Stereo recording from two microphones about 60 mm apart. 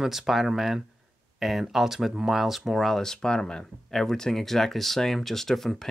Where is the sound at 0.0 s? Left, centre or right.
Centre.